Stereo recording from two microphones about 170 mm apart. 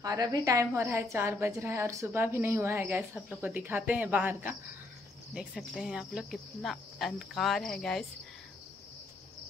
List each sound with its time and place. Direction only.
0.0 s a woman's voice: 20° right (ahead or behind); by 8.1 s 5° left (ahead or behind)